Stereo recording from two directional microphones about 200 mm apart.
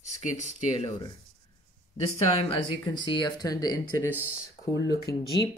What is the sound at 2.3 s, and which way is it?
Speech, 25° left (ahead or behind).